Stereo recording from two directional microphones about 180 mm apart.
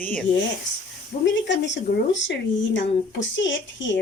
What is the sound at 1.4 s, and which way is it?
Speech, 85° left.